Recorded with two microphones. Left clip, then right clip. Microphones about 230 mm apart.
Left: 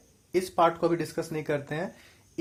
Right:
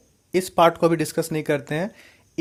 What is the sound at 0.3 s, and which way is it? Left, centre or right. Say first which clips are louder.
Speech: right 6 dB; right.